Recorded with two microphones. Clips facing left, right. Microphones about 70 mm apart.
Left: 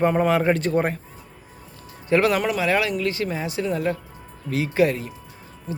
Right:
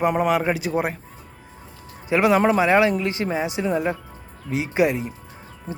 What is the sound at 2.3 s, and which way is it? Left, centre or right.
A man's voice, right.